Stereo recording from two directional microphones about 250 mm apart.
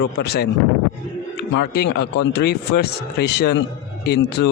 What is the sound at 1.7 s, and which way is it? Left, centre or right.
Speech, left.